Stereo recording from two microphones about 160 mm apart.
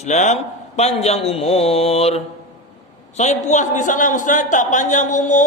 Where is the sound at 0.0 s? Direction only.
45° left (ahead or behind).